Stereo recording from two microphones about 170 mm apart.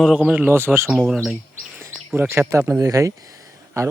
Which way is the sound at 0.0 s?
5° right (ahead or behind).